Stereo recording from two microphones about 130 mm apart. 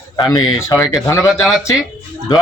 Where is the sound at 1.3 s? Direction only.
5° right (ahead or behind).